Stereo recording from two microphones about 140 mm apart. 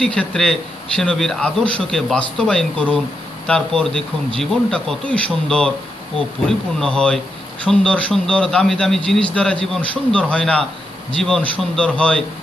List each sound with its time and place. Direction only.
0.0 s a man's voice: 5° left (ahead or behind)